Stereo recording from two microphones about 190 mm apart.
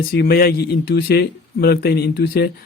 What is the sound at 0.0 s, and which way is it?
Speech, 55° left (ahead or behind).